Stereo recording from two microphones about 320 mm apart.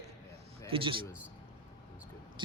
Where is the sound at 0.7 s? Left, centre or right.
Centre.